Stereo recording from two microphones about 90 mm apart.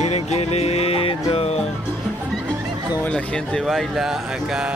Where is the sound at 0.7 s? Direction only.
90° left.